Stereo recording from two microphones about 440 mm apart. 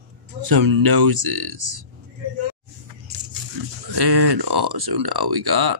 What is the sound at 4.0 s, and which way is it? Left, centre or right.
Speech, right.